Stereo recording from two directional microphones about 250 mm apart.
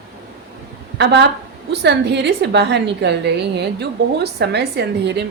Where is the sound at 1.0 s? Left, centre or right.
Right.